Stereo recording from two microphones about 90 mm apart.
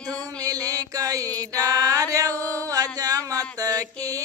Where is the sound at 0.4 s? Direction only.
45° right (ahead or behind).